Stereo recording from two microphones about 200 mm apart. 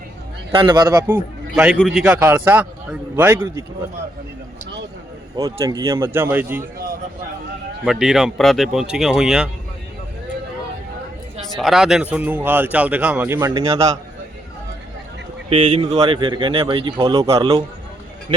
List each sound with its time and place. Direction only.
0.5 s speech: 25° right (ahead or behind)
1.5 s speech: 5° right (ahead or behind)
5.4 s speech: 15° right (ahead or behind)
7.9 s speech: 5° right (ahead or behind)
11.4 s speech: centre (ahead or behind)
15.4 s speech: 30° right (ahead or behind)